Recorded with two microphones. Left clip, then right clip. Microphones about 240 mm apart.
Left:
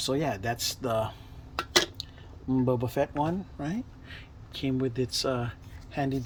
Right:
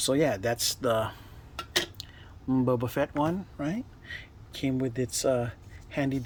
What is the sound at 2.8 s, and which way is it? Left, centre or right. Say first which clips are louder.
Speech: even; centre.